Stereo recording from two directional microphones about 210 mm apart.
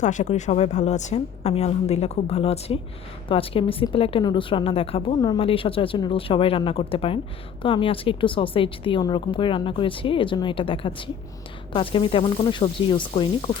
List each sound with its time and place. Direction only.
0.0 s a woman's voice: 35° left (ahead or behind)